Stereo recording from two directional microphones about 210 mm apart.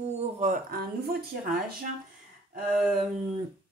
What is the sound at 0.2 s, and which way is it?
Speech, 35° right (ahead or behind).